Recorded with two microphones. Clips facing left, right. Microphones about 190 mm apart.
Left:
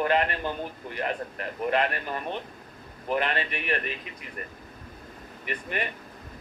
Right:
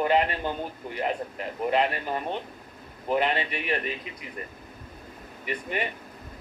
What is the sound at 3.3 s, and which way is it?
Speech, 15° right (ahead or behind).